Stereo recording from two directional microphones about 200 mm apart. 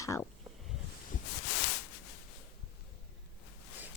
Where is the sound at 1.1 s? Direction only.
40° left (ahead or behind).